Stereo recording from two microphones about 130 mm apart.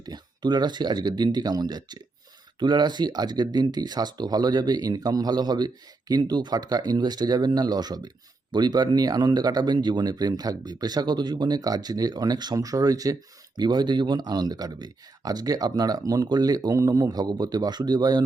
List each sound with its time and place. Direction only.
0.0 s speech: 30° right (ahead or behind)